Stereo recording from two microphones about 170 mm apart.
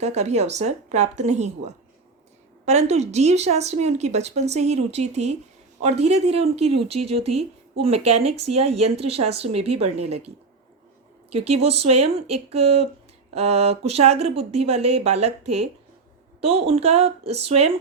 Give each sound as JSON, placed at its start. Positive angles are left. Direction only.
{"t": 0.0, "sound": "speech", "side_deg": -40}